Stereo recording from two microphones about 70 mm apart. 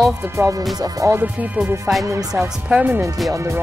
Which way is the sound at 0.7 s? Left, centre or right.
Right.